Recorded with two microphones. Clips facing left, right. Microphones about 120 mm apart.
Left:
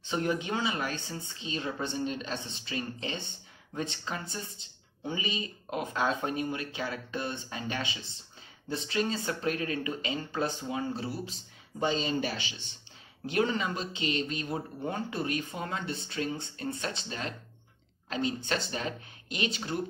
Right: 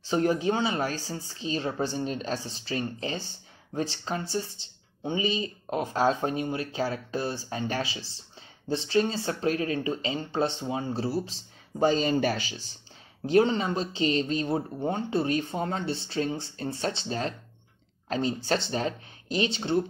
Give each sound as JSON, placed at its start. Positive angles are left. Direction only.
{"t": 0.0, "sound": "speech", "side_deg": -35}